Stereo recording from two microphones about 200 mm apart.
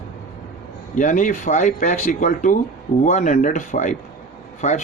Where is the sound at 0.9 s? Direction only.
40° left (ahead or behind).